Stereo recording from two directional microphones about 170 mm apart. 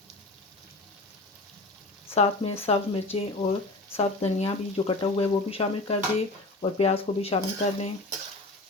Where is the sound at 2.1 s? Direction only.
35° left (ahead or behind).